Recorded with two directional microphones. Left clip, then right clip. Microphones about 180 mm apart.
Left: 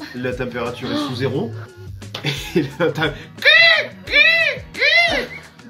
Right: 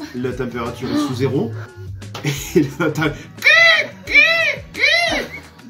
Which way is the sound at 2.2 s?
10° left (ahead or behind).